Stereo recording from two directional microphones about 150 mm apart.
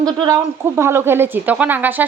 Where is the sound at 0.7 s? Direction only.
15° right (ahead or behind).